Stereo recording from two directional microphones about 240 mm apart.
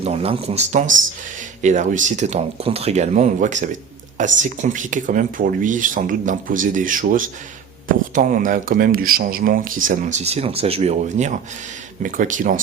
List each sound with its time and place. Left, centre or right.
0.0 s speech: right